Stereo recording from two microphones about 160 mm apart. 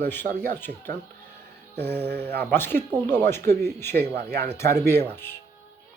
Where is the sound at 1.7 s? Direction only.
90° right.